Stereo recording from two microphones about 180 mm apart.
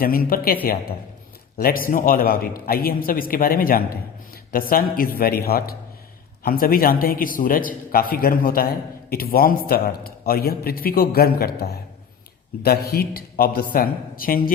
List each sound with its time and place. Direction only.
0.0 s a man's voice: 50° left (ahead or behind)